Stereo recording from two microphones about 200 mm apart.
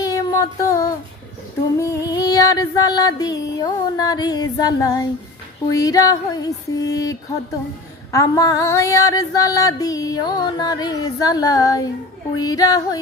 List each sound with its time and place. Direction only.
0.0 s music: 15° left (ahead or behind)
1.8 s female singing: 15° left (ahead or behind)